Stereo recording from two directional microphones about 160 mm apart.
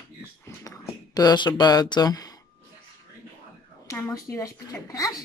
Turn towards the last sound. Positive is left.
turn(degrees=20)  # may be behind; listen again after turning